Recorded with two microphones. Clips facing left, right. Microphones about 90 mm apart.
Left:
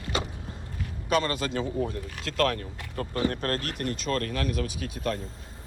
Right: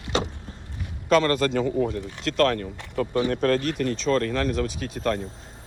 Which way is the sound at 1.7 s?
60° right (ahead or behind).